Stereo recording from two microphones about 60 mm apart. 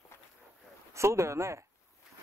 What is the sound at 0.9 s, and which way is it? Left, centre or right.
Speech, right.